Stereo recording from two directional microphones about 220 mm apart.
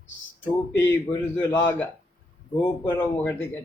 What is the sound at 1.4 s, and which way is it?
A man's voice, 10° left (ahead or behind).